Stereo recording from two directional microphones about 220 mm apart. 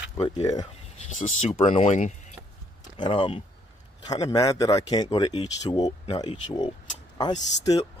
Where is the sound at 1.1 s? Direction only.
35° left (ahead or behind).